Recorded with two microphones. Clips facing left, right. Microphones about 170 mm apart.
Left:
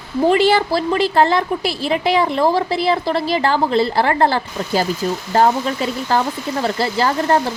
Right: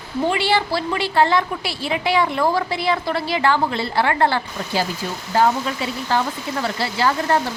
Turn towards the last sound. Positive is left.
turn(degrees=40)  # may be behind; listen again after turning